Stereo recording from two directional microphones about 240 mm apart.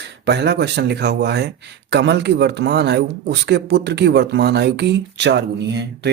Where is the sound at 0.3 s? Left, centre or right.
Right.